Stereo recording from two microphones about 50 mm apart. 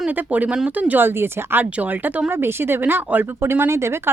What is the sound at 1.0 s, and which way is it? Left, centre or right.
Speech, right.